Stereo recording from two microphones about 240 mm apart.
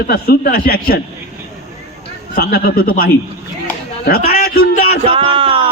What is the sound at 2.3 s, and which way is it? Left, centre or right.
Speech, left.